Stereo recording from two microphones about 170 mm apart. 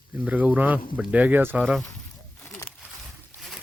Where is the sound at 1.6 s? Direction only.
Centre (ahead or behind).